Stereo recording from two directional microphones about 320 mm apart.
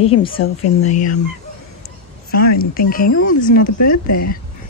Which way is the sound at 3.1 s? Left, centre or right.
Left.